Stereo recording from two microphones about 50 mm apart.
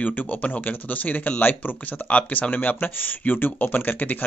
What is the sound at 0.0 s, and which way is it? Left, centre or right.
Speech, left.